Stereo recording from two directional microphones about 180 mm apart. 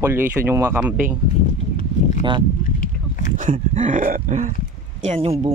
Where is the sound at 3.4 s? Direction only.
45° right (ahead or behind).